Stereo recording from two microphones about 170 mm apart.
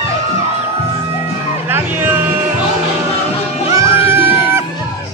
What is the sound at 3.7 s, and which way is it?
Music, 15° right (ahead or behind).